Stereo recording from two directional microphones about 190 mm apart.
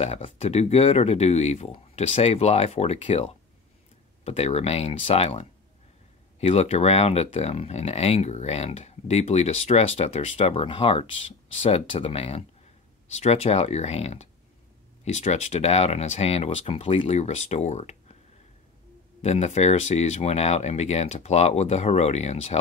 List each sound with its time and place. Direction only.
0.0 s speech: 35° left (ahead or behind)
19.2 s speech: 35° left (ahead or behind)